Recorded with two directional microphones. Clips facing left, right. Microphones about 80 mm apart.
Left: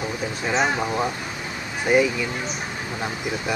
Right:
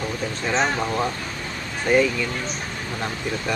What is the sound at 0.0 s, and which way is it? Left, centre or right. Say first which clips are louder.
Speech: even; centre.